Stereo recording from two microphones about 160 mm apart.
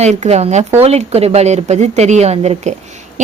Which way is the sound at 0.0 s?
45° right (ahead or behind).